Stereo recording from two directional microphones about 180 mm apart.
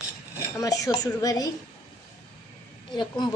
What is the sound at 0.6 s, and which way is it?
Speech, 20° left (ahead or behind).